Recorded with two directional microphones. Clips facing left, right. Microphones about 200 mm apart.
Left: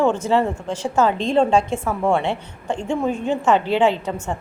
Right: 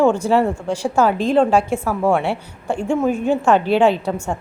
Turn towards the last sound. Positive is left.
turn(degrees=-10)  # may be behind; listen again after turning